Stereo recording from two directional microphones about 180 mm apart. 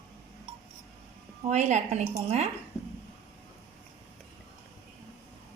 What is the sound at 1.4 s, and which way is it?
A woman's voice, 40° right (ahead or behind).